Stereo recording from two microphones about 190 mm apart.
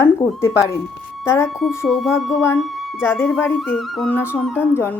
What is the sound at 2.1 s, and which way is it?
Speech, 15° left (ahead or behind).